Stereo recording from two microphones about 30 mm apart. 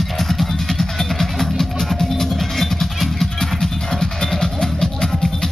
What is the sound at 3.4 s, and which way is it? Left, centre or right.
Music, centre.